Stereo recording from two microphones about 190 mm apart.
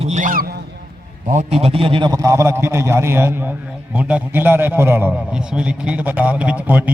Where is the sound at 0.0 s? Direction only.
40° right (ahead or behind).